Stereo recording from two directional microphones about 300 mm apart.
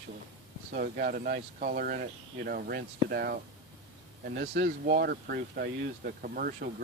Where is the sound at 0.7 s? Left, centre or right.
Right.